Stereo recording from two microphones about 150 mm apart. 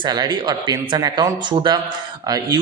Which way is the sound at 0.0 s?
30° right (ahead or behind).